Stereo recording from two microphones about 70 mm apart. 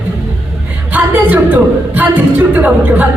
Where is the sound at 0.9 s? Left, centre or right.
Right.